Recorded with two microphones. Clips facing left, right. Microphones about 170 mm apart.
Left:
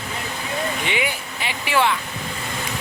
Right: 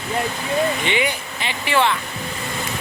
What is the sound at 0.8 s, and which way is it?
Speech, 5° left (ahead or behind).